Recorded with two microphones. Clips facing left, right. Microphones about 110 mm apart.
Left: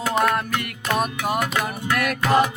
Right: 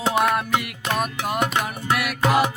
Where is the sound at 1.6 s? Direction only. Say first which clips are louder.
Left 1 dB; 5° right (ahead or behind).